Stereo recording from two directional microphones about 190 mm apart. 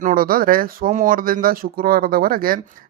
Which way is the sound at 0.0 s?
50° right (ahead or behind).